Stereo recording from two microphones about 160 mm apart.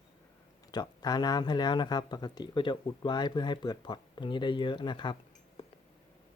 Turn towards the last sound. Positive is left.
turn(degrees=30)  # may be behind; listen again after turning